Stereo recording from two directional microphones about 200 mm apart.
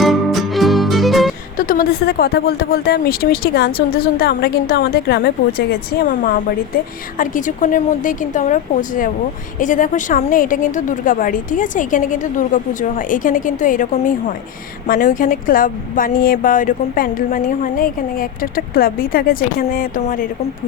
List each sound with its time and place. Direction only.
0.0 s music: centre (ahead or behind)
1.5 s a woman's voice: 45° left (ahead or behind)